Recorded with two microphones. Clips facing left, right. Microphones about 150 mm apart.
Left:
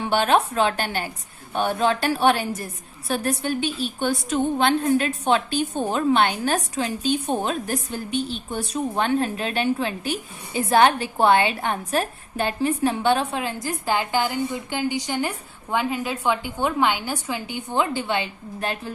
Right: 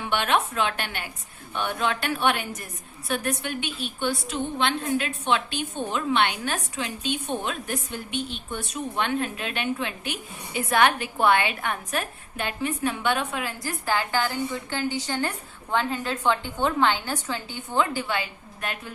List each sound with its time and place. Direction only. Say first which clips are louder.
0.0 s a woman's voice: left 5 dB; 35° left (ahead or behind)